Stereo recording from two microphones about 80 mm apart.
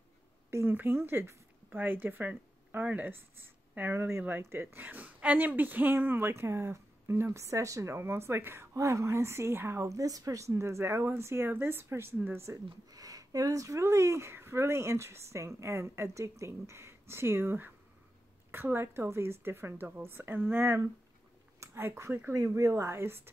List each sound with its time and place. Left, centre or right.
0.5 s speech: right
8.7 s speech: right
10.5 s a woman's voice: right
12.9 s a woman's voice: right